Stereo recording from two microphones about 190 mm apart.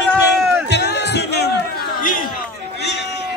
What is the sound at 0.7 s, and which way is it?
Music, 65° left (ahead or behind).